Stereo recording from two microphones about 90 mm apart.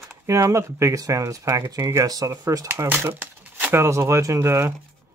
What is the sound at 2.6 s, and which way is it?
Speech, 25° right (ahead or behind).